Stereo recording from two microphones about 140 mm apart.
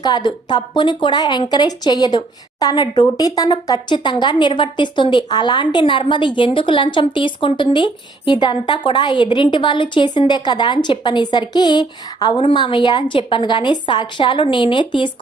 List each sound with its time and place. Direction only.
0.0 s speech: 30° left (ahead or behind)